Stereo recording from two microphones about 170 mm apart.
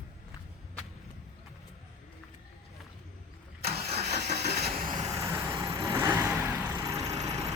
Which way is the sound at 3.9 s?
40° right (ahead or behind).